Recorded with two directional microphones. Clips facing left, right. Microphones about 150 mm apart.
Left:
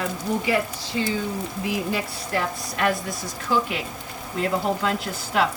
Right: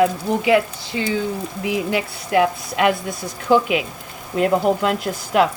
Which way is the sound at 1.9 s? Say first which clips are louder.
Right 7 dB; 75° right (ahead or behind).